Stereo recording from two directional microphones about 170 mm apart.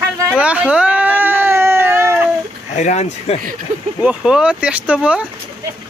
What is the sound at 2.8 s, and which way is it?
Speech, 40° left (ahead or behind).